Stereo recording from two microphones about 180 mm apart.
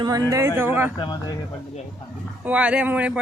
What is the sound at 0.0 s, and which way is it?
Speech, 20° right (ahead or behind).